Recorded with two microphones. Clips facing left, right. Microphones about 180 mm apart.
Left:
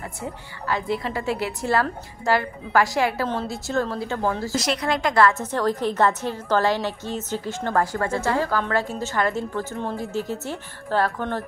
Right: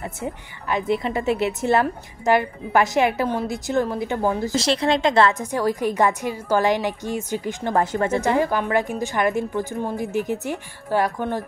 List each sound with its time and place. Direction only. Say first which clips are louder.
0.0 s a woman's voice: right 3 dB; 20° right (ahead or behind)
5.4 s a woman's voice: right 1 dB; 10° right (ahead or behind)